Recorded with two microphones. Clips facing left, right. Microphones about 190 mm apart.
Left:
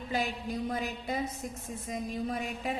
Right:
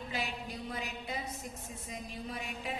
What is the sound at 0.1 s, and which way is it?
A woman's voice, 45° left (ahead or behind).